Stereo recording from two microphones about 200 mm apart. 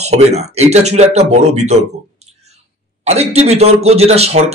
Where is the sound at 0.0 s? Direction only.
35° right (ahead or behind).